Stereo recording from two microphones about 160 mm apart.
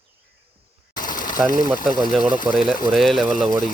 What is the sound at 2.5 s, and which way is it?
Speech, centre (ahead or behind).